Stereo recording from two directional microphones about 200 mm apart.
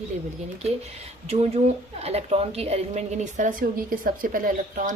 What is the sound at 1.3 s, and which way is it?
A woman's voice, 30° right (ahead or behind).